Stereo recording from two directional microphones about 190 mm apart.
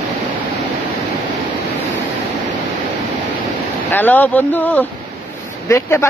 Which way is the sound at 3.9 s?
10° left (ahead or behind).